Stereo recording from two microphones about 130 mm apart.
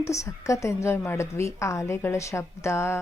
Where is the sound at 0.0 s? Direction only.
25° left (ahead or behind).